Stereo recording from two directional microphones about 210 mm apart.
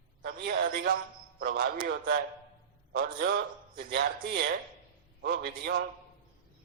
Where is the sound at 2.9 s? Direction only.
45° right (ahead or behind).